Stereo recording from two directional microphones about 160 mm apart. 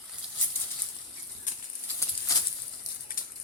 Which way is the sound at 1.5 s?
50° left (ahead or behind).